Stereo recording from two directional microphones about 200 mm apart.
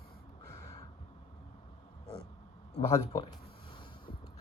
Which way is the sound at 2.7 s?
20° left (ahead or behind).